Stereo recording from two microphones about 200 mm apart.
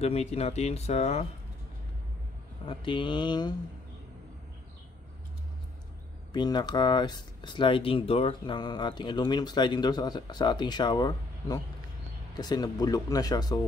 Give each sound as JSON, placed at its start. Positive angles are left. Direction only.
{"t": 0.0, "sound": "speech", "side_deg": 30}
{"t": 2.6, "sound": "speech", "side_deg": 25}
{"t": 6.3, "sound": "speech", "side_deg": 20}